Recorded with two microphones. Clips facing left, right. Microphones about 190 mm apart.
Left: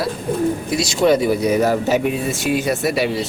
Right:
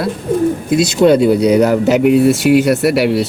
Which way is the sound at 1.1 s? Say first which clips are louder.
Right 5 dB; 65° right (ahead or behind).